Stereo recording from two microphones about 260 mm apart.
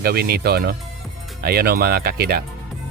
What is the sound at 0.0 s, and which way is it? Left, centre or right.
Speech, right.